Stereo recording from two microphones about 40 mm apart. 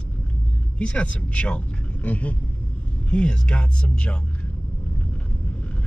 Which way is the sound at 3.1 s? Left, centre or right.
Left.